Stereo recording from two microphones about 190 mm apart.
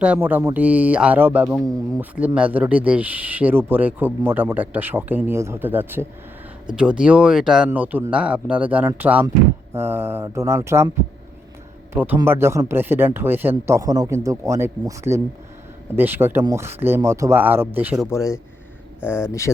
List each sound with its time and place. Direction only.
0.0 s speech: 10° right (ahead or behind)
11.9 s speech: 10° right (ahead or behind)
18.1 s speech: 15° left (ahead or behind)